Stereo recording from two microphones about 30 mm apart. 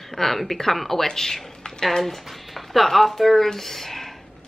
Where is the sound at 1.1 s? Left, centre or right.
Centre.